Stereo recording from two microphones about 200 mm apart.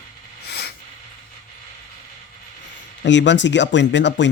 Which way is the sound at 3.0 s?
65° left (ahead or behind).